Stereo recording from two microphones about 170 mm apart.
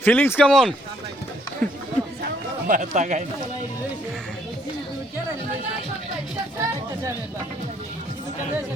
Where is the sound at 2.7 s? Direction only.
45° right (ahead or behind).